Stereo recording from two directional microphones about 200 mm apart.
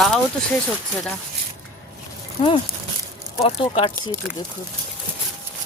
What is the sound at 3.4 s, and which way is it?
Speech, 30° left (ahead or behind).